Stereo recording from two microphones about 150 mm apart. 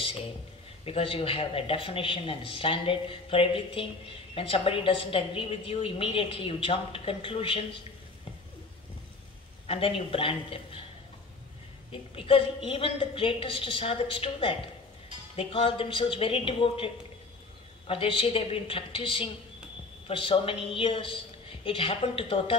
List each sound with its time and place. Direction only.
0.8 s a woman's voice: 35° left (ahead or behind)
9.7 s a woman's voice: 35° left (ahead or behind)
11.9 s a woman's voice: 35° left (ahead or behind)